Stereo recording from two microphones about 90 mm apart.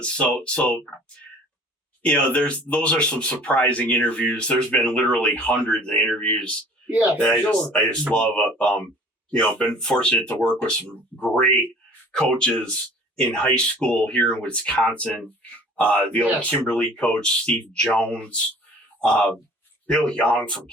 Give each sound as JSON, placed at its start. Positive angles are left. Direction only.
{"t": 0.0, "sound": "speech", "side_deg": 10}
{"t": 2.0, "sound": "speech", "side_deg": 10}
{"t": 6.9, "sound": "speech", "side_deg": -15}
{"t": 7.4, "sound": "speech", "side_deg": 15}